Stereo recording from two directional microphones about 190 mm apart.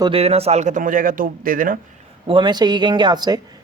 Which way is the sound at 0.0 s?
30° right (ahead or behind).